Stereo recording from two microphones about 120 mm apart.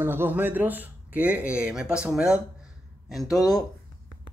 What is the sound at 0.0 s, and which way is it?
Speech, 20° right (ahead or behind).